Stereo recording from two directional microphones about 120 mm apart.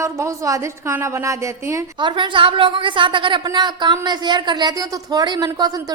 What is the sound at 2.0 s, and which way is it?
A woman's voice, 40° right (ahead or behind).